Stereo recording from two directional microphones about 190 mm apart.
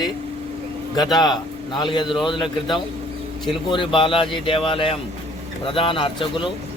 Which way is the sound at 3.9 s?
25° left (ahead or behind).